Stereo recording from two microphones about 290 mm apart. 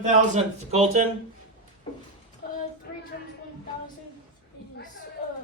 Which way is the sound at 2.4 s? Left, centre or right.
Left.